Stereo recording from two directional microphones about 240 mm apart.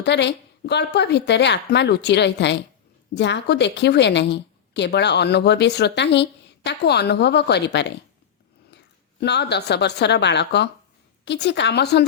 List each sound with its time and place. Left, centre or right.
0.0 s a woman's voice: left
9.2 s a woman's voice: left